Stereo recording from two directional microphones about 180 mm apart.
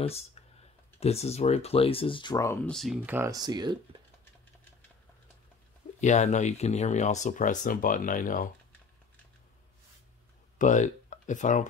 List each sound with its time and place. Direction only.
0.0 s speech: 35° left (ahead or behind); by 3.0 s centre (ahead or behind)
3.0 s speech: 10° right (ahead or behind)
5.9 s speech: 40° left (ahead or behind)
10.6 s speech: 40° left (ahead or behind)